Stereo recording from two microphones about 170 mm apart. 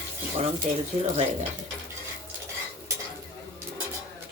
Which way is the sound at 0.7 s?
45° right (ahead or behind).